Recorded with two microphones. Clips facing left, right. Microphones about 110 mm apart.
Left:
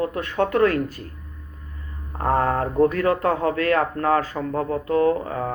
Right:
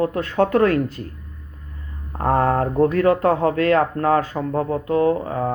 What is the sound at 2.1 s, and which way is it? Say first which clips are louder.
A man's voice: right 3 dB; 35° right (ahead or behind).